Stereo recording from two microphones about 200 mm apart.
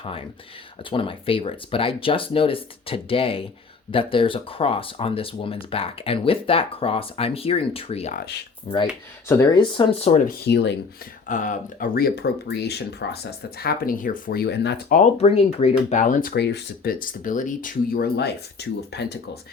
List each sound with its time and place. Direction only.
0.0 s speech: 25° left (ahead or behind)
10.2 s speech: 55° left (ahead or behind)
11.3 s speech: 40° left (ahead or behind); by 14.9 s 55° left (ahead or behind)
14.9 s speech: 35° left (ahead or behind); by 19.4 s 55° left (ahead or behind)